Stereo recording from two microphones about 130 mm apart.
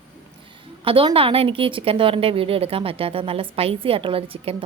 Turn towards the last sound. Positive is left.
turn(degrees=-45)  # may be behind; listen again after turning